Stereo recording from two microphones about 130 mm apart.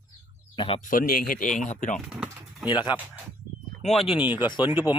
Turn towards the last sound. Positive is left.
turn(degrees=35)  # may be behind; listen again after turning